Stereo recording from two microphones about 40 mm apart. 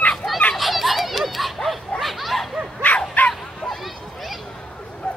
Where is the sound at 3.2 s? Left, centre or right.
Left.